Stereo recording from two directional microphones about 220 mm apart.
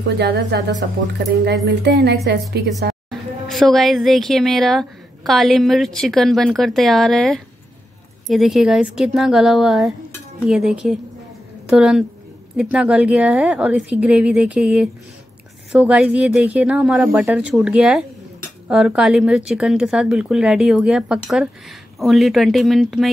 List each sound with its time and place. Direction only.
0.2 s speech: 50° right (ahead or behind)
3.1 s speech: centre (ahead or behind)